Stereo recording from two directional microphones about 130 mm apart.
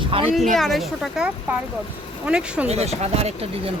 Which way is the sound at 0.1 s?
40° right (ahead or behind).